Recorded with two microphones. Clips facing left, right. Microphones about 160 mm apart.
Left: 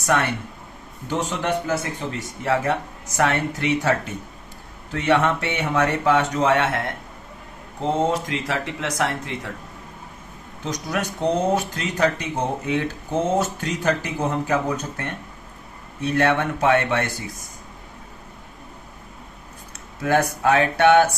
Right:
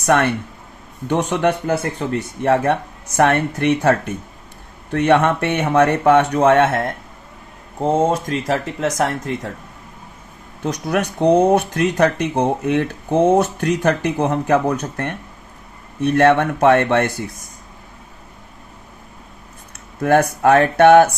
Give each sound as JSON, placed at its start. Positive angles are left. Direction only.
{"t": 0.0, "sound": "speech", "side_deg": -60}
{"t": 10.7, "sound": "speech", "side_deg": -60}
{"t": 16.0, "sound": "speech", "side_deg": -55}
{"t": 20.0, "sound": "speech", "side_deg": -55}